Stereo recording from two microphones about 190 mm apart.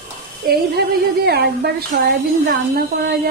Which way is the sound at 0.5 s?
55° right (ahead or behind).